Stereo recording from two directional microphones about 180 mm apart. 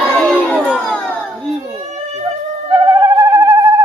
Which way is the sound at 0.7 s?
Centre (ahead or behind).